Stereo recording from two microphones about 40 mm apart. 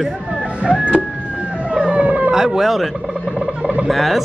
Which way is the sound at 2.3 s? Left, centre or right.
Centre.